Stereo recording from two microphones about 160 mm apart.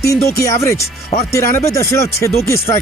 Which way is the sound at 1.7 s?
20° left (ahead or behind).